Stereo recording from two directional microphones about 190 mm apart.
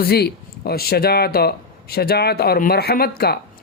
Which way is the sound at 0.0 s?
55° left (ahead or behind).